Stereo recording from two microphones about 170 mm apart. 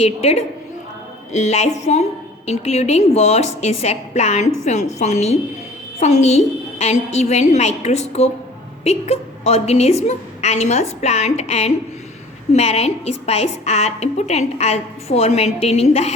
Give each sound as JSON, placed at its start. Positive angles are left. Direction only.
{"t": 0.0, "sound": "a woman's voice", "side_deg": 40}